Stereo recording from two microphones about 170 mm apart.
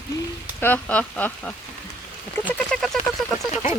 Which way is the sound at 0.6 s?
10° left (ahead or behind).